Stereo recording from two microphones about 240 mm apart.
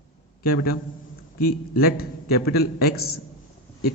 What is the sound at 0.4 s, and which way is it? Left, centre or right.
A man's voice, left.